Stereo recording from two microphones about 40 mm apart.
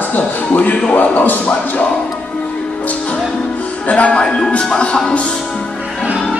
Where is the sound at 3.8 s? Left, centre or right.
Left.